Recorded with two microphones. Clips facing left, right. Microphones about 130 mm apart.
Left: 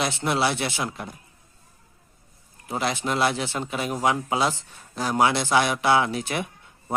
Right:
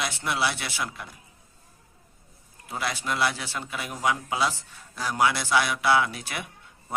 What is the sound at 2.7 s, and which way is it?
A man's voice, 25° left (ahead or behind).